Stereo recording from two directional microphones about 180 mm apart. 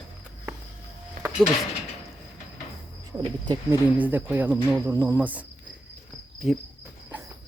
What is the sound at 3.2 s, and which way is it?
Speech, 25° right (ahead or behind).